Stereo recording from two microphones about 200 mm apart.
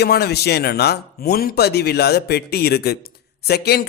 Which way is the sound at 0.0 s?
55° left (ahead or behind).